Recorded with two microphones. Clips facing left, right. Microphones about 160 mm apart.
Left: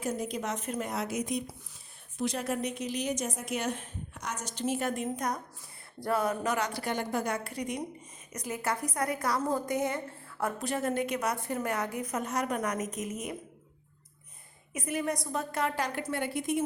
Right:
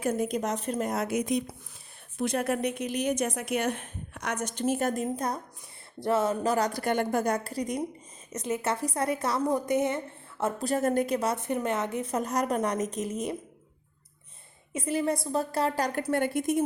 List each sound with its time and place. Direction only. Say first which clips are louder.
0.0 s a woman's voice: right 5 dB; 55° right (ahead or behind); by 1.4 s 75° right (ahead or behind)
2.1 s a woman's voice: right 4 dB; 55° right (ahead or behind); by 7.8 s 35° right (ahead or behind)
8.3 s a woman's voice: right 4 dB; 25° right (ahead or behind)
10.6 s a woman's voice: right 6 dB; 40° right (ahead or behind)
14.7 s a woman's voice: right 4 dB; 30° right (ahead or behind); by 16.6 s 45° right (ahead or behind)